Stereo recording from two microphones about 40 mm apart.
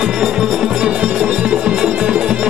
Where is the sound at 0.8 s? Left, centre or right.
Right.